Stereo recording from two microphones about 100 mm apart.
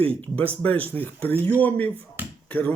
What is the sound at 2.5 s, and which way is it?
Speech, 15° left (ahead or behind).